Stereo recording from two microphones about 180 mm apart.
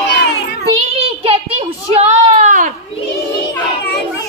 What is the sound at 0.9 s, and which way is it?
Child singing, 35° right (ahead or behind).